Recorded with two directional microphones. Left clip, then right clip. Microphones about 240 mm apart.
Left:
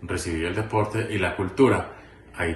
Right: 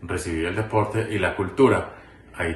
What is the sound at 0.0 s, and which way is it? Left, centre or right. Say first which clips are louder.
A man's voice: right 1 dB; centre.